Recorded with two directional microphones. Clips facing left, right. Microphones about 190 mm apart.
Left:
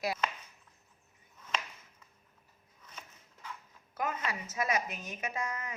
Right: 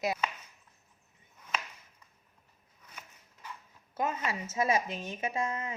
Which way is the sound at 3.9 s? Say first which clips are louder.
Right 3 dB; 25° right (ahead or behind).